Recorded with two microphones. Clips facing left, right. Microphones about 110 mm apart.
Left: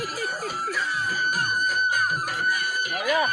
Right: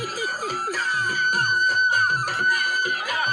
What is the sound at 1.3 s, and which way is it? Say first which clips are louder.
Music: right 3 dB; 55° right (ahead or behind).